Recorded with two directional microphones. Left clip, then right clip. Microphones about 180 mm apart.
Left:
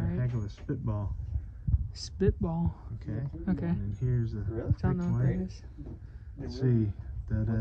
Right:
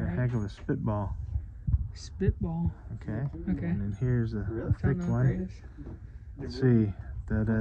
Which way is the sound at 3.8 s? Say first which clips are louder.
Right 4 dB; 40° right (ahead or behind).